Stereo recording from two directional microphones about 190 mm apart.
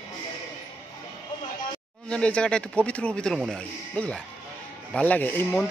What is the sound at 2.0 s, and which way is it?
Speech, 5° left (ahead or behind).